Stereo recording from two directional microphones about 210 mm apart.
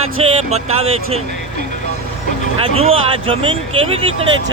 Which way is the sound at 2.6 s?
30° right (ahead or behind).